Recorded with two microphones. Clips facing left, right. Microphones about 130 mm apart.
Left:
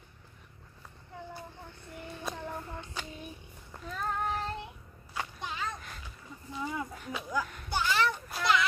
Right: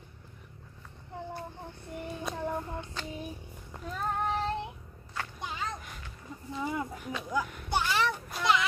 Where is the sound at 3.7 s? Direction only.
15° right (ahead or behind).